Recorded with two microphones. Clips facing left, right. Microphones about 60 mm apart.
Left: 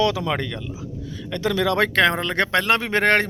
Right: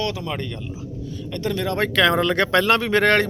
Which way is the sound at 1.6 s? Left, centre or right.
Left.